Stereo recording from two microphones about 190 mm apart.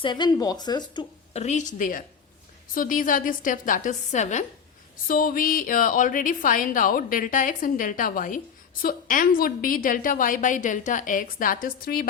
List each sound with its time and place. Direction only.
0.0 s speech: 25° left (ahead or behind)
1.3 s a woman's voice: 35° left (ahead or behind)